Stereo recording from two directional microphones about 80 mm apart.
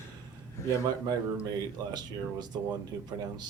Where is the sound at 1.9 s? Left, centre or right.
Right.